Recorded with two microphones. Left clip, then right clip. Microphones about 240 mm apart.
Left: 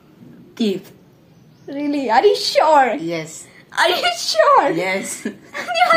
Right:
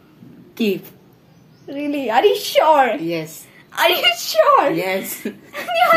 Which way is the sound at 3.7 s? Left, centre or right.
Centre.